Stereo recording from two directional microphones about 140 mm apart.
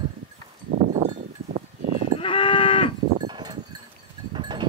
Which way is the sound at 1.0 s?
55° right (ahead or behind).